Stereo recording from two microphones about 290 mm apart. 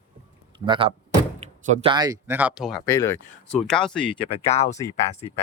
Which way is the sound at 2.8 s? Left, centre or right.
Centre.